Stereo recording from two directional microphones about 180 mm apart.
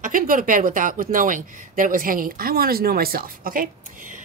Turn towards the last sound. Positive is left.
turn(degrees=-50)  # may be behind; listen again after turning